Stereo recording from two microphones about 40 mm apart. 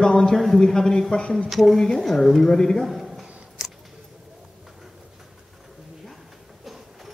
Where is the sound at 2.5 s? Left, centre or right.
Centre.